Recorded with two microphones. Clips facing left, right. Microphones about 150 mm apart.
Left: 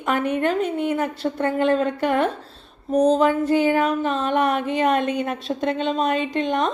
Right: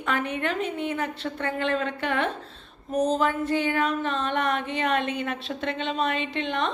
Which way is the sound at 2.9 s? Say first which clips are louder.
Left 6 dB; 40° left (ahead or behind).